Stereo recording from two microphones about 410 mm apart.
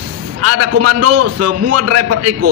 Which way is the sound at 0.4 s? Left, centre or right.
Right.